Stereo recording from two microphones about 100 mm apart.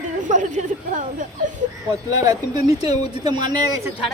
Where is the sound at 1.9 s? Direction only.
40° right (ahead or behind).